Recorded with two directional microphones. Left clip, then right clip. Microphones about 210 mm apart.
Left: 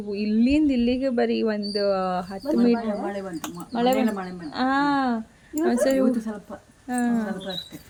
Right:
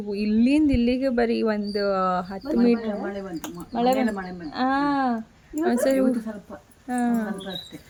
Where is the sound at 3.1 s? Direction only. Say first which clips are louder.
Left 1 dB; 35° left (ahead or behind).